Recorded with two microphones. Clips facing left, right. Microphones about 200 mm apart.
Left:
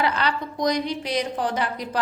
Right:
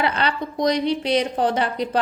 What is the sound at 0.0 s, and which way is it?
A woman's voice, 25° right (ahead or behind).